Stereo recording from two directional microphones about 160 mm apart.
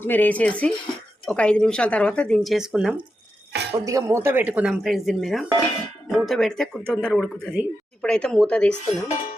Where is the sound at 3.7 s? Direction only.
20° right (ahead or behind); by 8.7 s 5° left (ahead or behind).